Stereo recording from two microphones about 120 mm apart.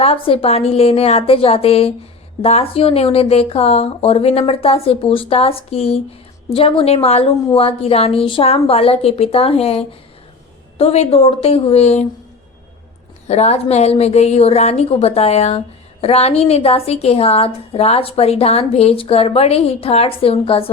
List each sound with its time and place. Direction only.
0.0 s a woman's voice: 55° left (ahead or behind)
13.2 s a woman's voice: 65° left (ahead or behind)